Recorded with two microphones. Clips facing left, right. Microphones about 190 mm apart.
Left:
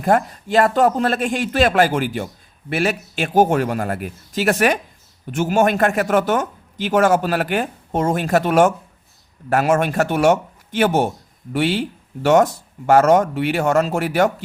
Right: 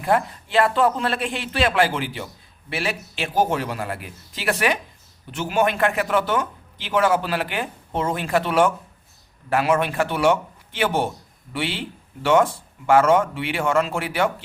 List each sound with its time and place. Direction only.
0.0 s speech: 45° left (ahead or behind)